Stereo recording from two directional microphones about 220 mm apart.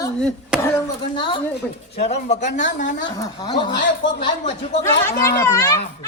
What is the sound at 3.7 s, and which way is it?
Speech, 50° left (ahead or behind).